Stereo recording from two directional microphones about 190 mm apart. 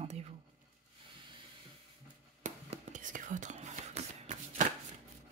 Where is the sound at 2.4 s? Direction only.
40° right (ahead or behind).